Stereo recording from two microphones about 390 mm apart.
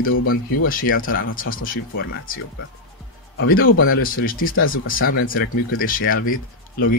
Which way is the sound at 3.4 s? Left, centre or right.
Left.